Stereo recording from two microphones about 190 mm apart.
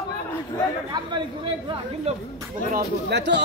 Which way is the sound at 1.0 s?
20° right (ahead or behind).